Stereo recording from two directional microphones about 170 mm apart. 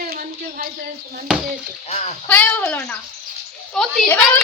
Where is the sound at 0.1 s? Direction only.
65° right (ahead or behind).